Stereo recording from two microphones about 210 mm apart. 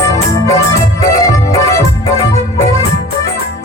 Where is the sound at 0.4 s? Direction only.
15° left (ahead or behind).